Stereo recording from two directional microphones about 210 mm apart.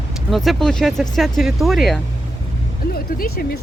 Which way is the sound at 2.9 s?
45° left (ahead or behind).